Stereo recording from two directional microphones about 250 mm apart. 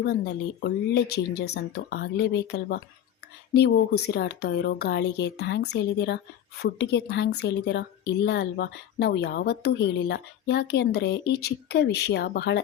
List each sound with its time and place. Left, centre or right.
0.6 s a woman's voice: left